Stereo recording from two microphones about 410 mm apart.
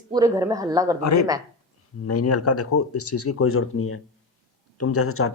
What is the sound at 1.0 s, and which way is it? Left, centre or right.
Speech, left.